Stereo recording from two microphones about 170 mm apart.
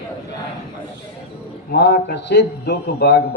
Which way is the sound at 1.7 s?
80° left.